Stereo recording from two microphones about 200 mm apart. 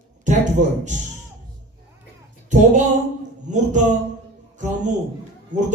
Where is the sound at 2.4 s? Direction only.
35° right (ahead or behind).